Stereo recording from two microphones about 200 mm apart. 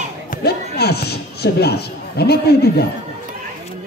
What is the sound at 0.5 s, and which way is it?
A man's voice, 55° left (ahead or behind).